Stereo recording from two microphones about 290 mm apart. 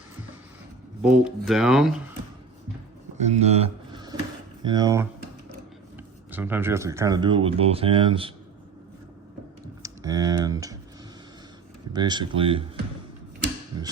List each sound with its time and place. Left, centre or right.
1.0 s speech: centre
3.2 s speech: right
6.3 s speech: centre
9.8 s speech: centre
11.9 s speech: centre